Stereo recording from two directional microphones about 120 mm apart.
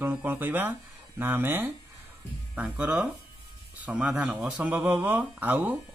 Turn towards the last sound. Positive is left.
turn(degrees=-15)  # may be behind; listen again after turning